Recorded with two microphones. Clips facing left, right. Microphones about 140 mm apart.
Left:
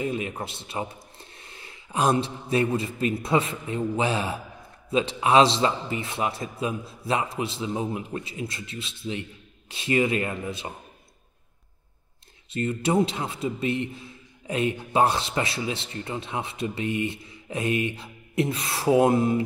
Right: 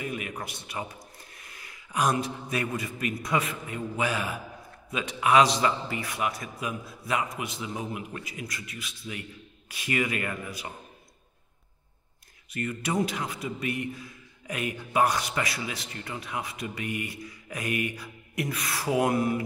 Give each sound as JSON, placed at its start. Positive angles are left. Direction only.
{"t": 0.0, "sound": "a man's voice", "side_deg": 25}
{"t": 12.4, "sound": "a man's voice", "side_deg": 25}